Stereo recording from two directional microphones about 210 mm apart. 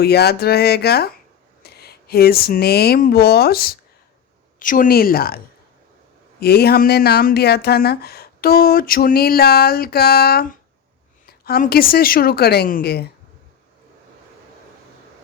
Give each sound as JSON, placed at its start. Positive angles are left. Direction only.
{"t": 0.0, "sound": "speech", "side_deg": 50}
{"t": 6.4, "sound": "speech", "side_deg": 50}